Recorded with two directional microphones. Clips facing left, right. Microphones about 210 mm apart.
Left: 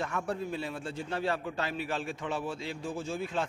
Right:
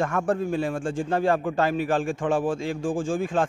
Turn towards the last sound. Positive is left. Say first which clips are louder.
# right 9 dB
turn(degrees=-50)  # may be behind; listen again after turning